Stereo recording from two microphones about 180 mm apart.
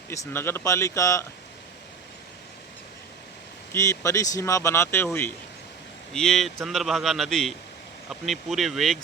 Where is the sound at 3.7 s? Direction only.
15° left (ahead or behind); by 9.0 s centre (ahead or behind).